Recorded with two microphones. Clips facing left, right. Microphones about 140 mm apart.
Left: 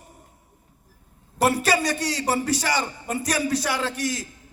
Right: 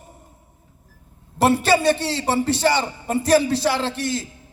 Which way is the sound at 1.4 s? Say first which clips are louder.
Right 4 dB; 25° right (ahead or behind).